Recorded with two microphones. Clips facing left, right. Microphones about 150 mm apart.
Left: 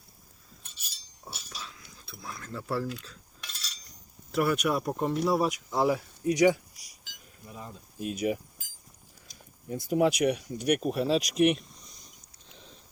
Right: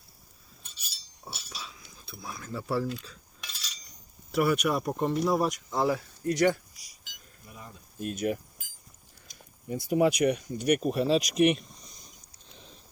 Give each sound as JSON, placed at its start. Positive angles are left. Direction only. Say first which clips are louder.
{"t": 0.8, "sound": "chink", "louder": "right 1 dB", "side_deg": -5}
{"t": 2.2, "sound": "speech", "louder": "right 2 dB", "side_deg": -5}
{"t": 3.0, "sound": "cutlery", "louder": "right 1 dB", "side_deg": 0}
{"t": 4.3, "sound": "speech", "louder": "right 1 dB", "side_deg": 0}
{"t": 7.4, "sound": "a sound", "louder": "left 4 dB", "side_deg": 25}
{"t": 7.9, "sound": "speech", "louder": "even", "side_deg": 5}
{"t": 9.6, "sound": "speech", "louder": "right 1 dB", "side_deg": 0}